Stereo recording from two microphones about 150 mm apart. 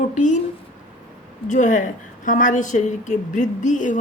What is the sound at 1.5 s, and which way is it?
A woman's voice, 55° left (ahead or behind).